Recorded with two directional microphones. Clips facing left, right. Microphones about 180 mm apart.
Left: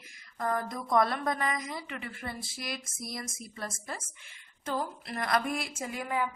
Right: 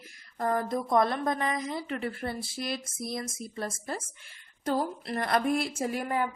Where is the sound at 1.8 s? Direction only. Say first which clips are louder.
Right 7 dB; 40° right (ahead or behind).